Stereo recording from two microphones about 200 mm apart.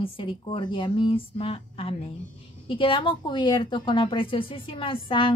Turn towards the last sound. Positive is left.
turn(degrees=25)  # may be behind; listen again after turning